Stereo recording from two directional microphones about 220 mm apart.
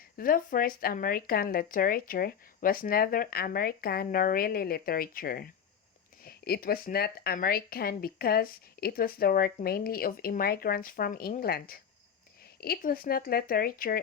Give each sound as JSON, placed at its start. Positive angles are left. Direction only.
{"t": 0.2, "sound": "speech", "side_deg": 40}